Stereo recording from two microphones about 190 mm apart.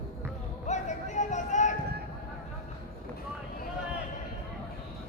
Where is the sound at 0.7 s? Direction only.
40° left (ahead or behind).